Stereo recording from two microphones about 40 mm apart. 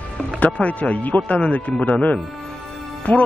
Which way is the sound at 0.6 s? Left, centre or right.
Left.